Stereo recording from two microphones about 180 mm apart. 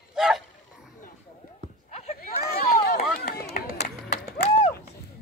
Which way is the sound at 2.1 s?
60° left (ahead or behind).